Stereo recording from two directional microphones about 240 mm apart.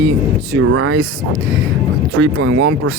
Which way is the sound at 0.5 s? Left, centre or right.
Right.